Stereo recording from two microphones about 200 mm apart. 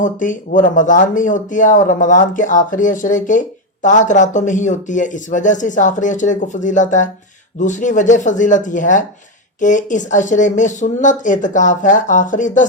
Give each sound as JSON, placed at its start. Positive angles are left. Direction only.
{"t": 0.0, "sound": "speech", "side_deg": 40}